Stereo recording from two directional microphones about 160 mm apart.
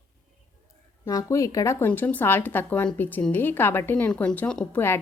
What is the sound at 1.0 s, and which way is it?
Speech, 20° left (ahead or behind).